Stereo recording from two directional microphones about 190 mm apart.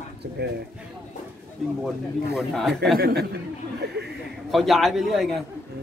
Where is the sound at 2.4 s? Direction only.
Centre (ahead or behind).